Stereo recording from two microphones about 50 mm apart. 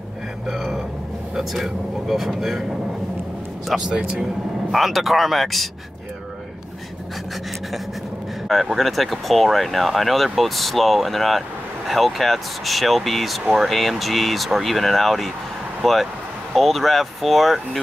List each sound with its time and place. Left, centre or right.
0.5 s a sound: centre
1.3 s speech: centre
3.9 s speech: centre
4.2 s speech: centre
8.5 s speech: centre